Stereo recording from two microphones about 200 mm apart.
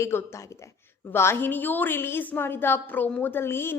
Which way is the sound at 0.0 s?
15° left (ahead or behind).